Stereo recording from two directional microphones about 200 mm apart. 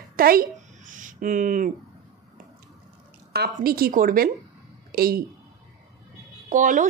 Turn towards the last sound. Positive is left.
turn(degrees=-40)  # may be behind; listen again after turning